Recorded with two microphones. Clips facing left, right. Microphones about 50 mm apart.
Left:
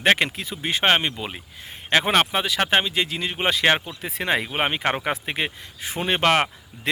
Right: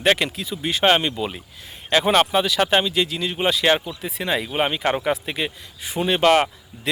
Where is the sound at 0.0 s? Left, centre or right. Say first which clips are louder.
Even; left.